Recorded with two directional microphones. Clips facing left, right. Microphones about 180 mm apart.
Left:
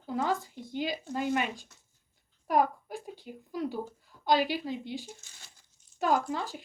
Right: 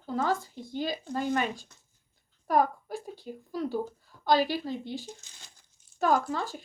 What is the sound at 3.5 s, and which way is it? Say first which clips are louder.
A woman's voice: right 2 dB; 15° left (ahead or behind).